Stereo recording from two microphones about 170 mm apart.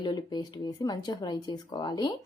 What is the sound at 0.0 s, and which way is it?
Speech, 25° left (ahead or behind).